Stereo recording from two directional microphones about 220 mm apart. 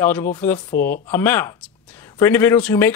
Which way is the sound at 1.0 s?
10° left (ahead or behind).